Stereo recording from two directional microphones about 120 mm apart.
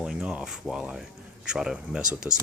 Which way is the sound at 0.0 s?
5° right (ahead or behind).